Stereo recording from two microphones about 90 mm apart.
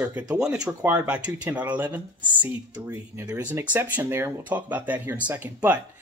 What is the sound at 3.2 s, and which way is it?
Speech, 20° right (ahead or behind).